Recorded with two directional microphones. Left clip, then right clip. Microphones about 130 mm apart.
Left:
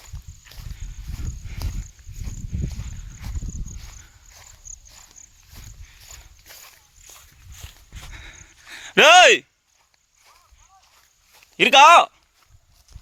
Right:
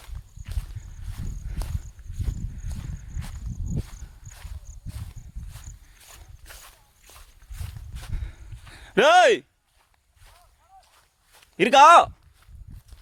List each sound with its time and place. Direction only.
0.0 s walk: centre (ahead or behind)
4.4 s a sound: 20° left (ahead or behind)
5.2 s walk: 65° left (ahead or behind)
5.5 s walk: centre (ahead or behind)
8.7 s a sound: 10° right (ahead or behind)
11.5 s a man's voice: 40° right (ahead or behind)